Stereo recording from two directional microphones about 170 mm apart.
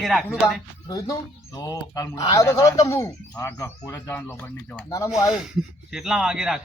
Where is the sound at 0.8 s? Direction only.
20° left (ahead or behind).